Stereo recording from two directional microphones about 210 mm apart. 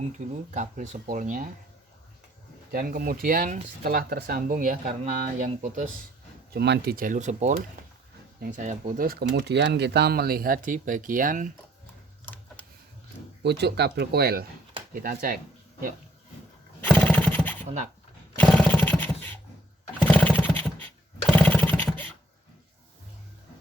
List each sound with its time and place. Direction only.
0.2 s speech: 35° right (ahead or behind)
2.7 s speech: 40° right (ahead or behind)
6.5 s speech: 50° right (ahead or behind)
13.4 s speech: 55° right (ahead or behind)
16.8 s a sound: 5° left (ahead or behind)
18.3 s roar: 5° left (ahead or behind)
20.1 s a sound: 5° left (ahead or behind)